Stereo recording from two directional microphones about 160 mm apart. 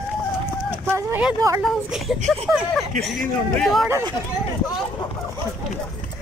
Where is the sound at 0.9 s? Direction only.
15° right (ahead or behind).